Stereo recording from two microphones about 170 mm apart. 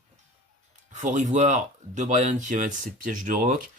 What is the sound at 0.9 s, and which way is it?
Speech, 45° right (ahead or behind).